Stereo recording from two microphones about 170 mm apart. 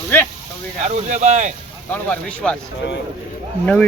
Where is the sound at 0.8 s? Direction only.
45° right (ahead or behind).